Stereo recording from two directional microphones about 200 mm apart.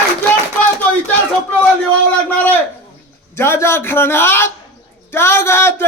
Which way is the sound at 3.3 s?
10° left (ahead or behind).